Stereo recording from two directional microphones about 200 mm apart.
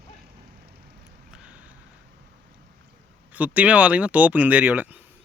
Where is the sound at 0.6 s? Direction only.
55° right (ahead or behind).